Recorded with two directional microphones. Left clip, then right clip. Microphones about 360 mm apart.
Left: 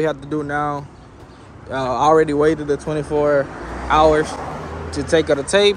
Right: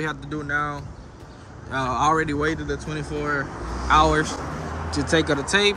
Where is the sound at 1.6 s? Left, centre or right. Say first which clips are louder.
Left 5 dB; centre.